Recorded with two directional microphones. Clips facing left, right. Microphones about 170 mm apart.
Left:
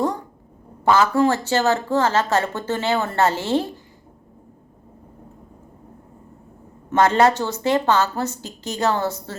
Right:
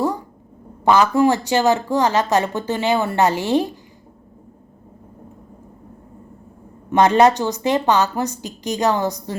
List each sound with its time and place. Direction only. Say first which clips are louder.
0.9 s speech: right 2 dB; 15° right (ahead or behind)
6.9 s speech: right 3 dB; 15° right (ahead or behind)